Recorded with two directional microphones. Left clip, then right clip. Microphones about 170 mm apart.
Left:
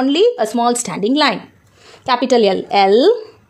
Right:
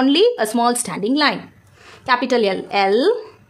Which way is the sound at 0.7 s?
15° left (ahead or behind).